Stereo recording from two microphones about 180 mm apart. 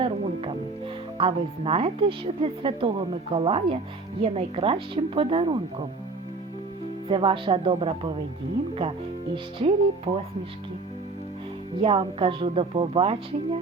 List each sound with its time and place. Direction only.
1.2 s a woman's voice: 30° right (ahead or behind)
7.1 s a woman's voice: 30° right (ahead or behind)
11.8 s a woman's voice: 30° right (ahead or behind)